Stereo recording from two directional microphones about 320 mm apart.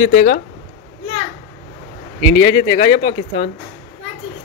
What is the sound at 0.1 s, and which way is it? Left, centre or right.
Speech, left.